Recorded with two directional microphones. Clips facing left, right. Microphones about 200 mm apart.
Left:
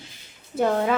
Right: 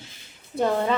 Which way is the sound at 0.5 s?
5° left (ahead or behind).